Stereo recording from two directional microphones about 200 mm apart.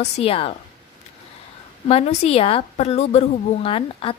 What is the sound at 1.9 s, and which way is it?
A woman's voice, 30° left (ahead or behind).